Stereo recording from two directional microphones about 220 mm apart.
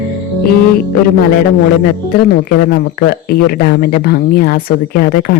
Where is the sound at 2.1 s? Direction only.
45° left (ahead or behind).